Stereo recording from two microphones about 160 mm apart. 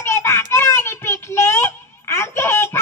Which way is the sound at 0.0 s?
15° left (ahead or behind).